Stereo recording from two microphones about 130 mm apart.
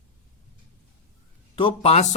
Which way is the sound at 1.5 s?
45° left (ahead or behind).